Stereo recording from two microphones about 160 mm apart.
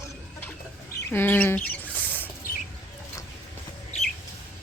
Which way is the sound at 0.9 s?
15° left (ahead or behind).